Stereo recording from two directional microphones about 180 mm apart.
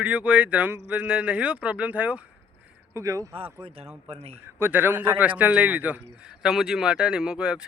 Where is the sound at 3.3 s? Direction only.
30° right (ahead or behind).